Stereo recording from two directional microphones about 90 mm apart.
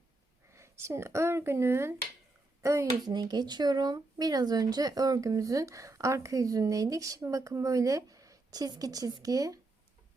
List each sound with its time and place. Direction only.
0.5 s a child's voice: 30° right (ahead or behind)
3.0 s speech: 50° right (ahead or behind)